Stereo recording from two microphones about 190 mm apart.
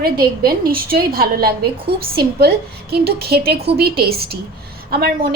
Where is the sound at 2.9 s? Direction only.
55° right (ahead or behind).